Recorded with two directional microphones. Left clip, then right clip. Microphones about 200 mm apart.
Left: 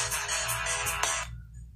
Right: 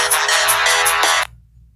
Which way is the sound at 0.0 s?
40° right (ahead or behind).